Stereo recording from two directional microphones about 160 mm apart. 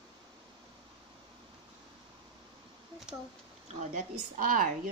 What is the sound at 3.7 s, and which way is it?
Speech, 55° right (ahead or behind).